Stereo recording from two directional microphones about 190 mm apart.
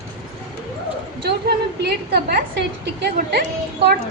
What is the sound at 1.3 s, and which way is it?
A woman's voice, 60° right (ahead or behind).